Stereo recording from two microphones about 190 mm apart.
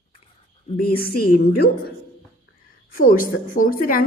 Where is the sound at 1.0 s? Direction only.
55° left (ahead or behind).